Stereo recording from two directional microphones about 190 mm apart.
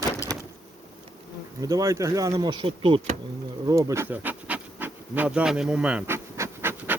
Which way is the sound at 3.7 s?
15° right (ahead or behind).